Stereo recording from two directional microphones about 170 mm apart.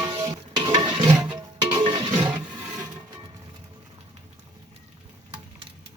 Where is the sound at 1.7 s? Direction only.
25° right (ahead or behind).